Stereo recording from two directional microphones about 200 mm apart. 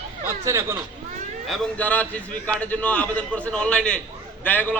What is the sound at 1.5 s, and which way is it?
A man's voice, 5° left (ahead or behind).